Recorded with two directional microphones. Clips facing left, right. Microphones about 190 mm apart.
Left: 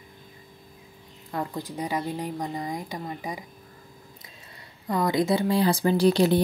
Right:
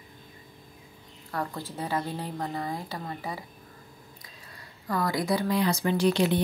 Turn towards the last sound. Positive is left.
turn(degrees=35)  # may be behind; listen again after turning